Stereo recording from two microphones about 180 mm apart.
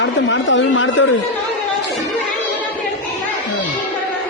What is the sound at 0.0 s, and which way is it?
A man's voice, 90° left.